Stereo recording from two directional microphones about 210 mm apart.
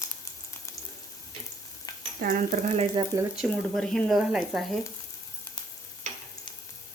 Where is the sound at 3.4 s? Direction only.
Centre (ahead or behind).